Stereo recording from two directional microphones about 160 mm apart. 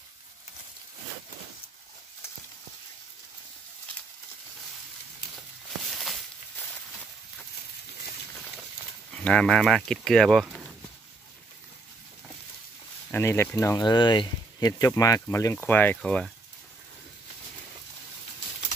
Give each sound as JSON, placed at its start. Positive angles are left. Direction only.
{"t": 9.1, "sound": "speech", "side_deg": 5}
{"t": 13.1, "sound": "speech", "side_deg": 15}